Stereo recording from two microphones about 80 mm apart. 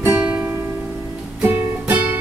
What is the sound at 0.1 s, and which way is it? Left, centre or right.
Music, centre.